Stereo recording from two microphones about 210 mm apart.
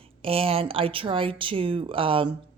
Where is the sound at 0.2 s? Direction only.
25° right (ahead or behind).